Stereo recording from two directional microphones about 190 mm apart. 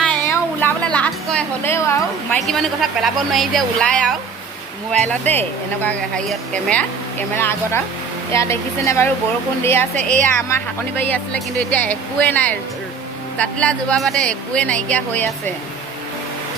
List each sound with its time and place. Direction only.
0.1 s a sound: 10° left (ahead or behind)
2.5 s a woman's voice: centre (ahead or behind)
9.9 s a woman's voice: 40° right (ahead or behind)
10.2 s speech: 10° left (ahead or behind)